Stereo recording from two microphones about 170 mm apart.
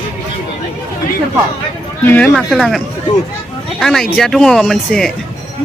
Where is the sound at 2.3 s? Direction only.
Centre (ahead or behind).